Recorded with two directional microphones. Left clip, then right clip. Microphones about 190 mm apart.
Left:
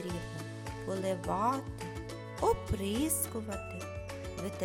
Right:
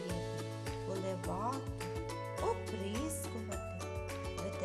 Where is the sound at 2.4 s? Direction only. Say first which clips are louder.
Left 8 dB; 30° left (ahead or behind).